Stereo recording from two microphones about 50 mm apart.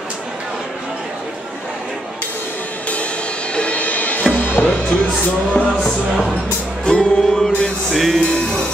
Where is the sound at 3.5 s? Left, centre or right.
Left.